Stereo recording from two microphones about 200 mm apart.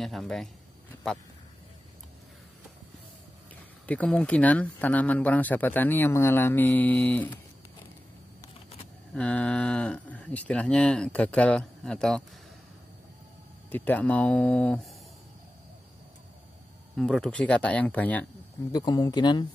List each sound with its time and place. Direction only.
0.0 s speech: centre (ahead or behind)
3.8 s speech: 5° left (ahead or behind)
9.1 s speech: 5° left (ahead or behind)
13.7 s speech: 10° left (ahead or behind)
16.9 s speech: centre (ahead or behind)
18.7 s speech: 20° left (ahead or behind)